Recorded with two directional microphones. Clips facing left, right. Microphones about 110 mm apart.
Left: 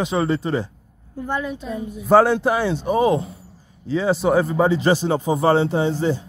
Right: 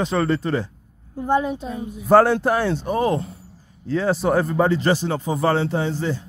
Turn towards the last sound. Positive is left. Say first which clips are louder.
# left 3 dB
turn(degrees=20)  # may be behind; listen again after turning